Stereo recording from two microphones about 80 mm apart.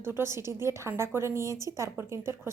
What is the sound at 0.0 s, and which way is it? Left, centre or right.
A woman's voice, right.